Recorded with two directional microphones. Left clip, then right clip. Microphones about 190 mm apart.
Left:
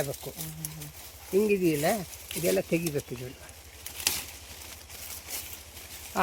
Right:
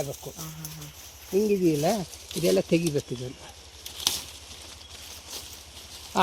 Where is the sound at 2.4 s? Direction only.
65° right (ahead or behind).